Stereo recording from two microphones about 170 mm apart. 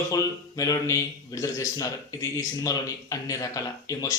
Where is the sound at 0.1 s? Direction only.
20° left (ahead or behind).